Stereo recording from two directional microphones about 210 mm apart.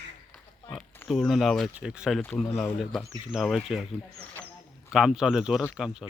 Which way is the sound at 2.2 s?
5° left (ahead or behind).